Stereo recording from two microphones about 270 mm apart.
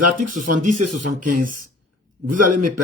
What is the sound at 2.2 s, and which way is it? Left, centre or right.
Speech, right.